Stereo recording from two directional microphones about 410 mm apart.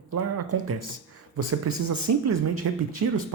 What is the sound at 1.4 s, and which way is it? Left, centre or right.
Speech, right.